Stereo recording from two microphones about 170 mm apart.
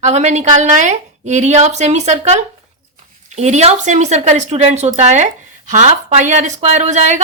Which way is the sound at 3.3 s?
40° right (ahead or behind).